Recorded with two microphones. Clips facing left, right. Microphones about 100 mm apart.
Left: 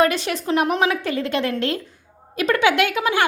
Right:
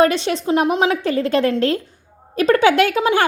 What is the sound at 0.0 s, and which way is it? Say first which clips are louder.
A woman's voice: right 3 dB; 30° right (ahead or behind).